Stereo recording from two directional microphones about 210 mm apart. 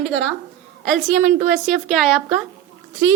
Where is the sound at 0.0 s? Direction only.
5° left (ahead or behind).